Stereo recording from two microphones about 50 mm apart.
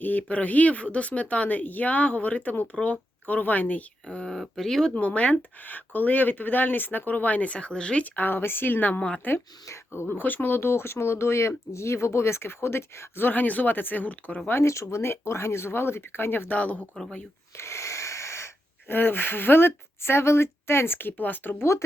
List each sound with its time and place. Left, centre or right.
0.0 s speech: left
4.0 s speech: centre
4.4 s speech: centre
4.9 s speech: left
8.0 s speech: left
9.6 s speech: left
10.1 s speech: left
14.6 s speech: left
16.6 s speech: left
16.9 s speech: centre
17.6 s wheeze: left
18.9 s speech: left
21.1 s speech: left
21.6 s speech: left